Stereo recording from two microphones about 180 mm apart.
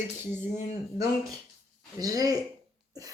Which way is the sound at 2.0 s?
20° right (ahead or behind).